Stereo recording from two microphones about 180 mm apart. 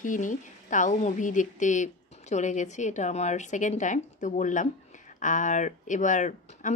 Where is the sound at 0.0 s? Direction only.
45° left (ahead or behind).